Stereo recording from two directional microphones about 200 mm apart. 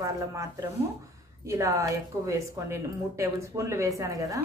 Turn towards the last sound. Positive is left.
turn(degrees=-15)  # may be behind; listen again after turning